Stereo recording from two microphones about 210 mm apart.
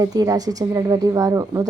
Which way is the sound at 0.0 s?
15° right (ahead or behind).